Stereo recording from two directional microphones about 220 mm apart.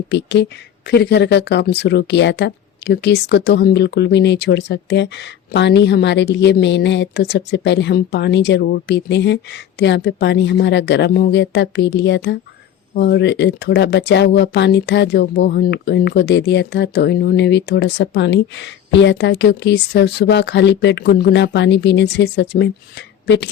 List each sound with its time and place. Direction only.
0.1 s speech: 50° left (ahead or behind)